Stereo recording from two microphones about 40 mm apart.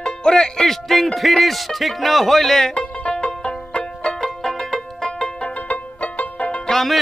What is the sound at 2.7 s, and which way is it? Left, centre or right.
Music, left.